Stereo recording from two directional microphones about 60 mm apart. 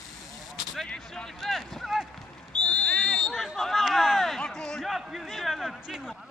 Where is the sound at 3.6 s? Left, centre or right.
Centre.